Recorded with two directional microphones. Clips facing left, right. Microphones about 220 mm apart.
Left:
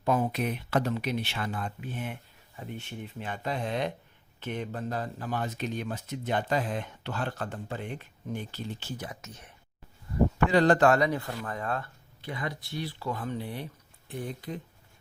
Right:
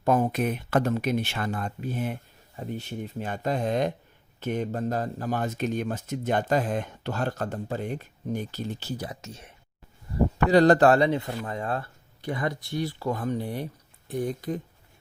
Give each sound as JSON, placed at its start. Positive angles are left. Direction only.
{"t": 0.0, "sound": "a man's voice", "side_deg": -45}
{"t": 10.3, "sound": "speech", "side_deg": -40}
{"t": 12.2, "sound": "a man's voice", "side_deg": -45}